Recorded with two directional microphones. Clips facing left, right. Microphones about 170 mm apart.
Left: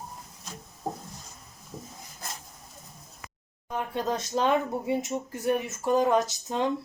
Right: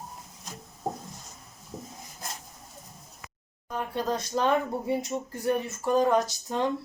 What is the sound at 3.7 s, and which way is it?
Speech, 20° left (ahead or behind).